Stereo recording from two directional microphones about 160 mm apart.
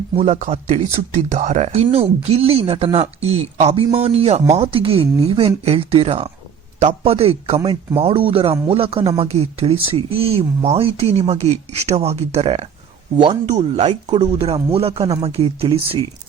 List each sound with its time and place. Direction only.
0.2 s speech: 50° right (ahead or behind); by 16.0 s 35° right (ahead or behind)